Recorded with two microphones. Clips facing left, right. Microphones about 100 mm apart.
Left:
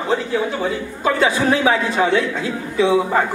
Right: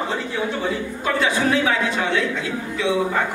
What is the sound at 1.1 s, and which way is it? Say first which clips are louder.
Speech: left 2 dB; 35° left (ahead or behind).